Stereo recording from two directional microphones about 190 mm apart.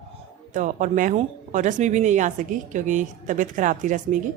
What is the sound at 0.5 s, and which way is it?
Speech, 40° right (ahead or behind).